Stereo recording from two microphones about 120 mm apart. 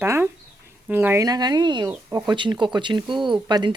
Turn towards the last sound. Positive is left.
turn(degrees=-35)  # may be behind; listen again after turning